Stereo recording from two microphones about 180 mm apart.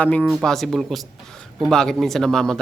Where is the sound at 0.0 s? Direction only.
5° left (ahead or behind).